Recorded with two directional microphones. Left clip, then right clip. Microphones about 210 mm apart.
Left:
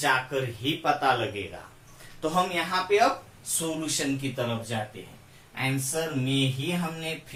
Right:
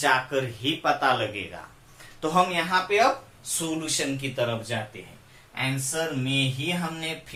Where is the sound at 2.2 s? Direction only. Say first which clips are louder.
Right 3 dB; 10° right (ahead or behind).